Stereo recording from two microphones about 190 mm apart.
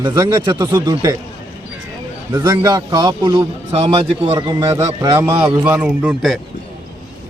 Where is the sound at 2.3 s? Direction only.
15° right (ahead or behind).